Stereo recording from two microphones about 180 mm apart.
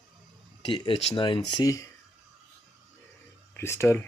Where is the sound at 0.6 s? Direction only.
25° left (ahead or behind).